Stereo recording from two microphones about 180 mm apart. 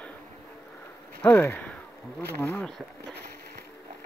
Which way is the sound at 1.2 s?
10° left (ahead or behind).